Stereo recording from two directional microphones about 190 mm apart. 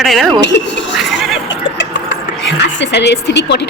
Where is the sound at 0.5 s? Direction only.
65° left (ahead or behind).